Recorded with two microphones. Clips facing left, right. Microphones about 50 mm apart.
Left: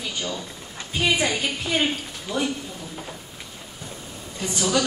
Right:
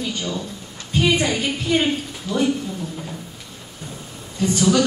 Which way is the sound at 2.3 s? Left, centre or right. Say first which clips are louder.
Right 4 dB; left.